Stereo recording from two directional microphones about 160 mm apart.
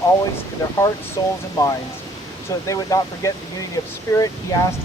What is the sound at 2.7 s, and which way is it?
Speech, 20° left (ahead or behind).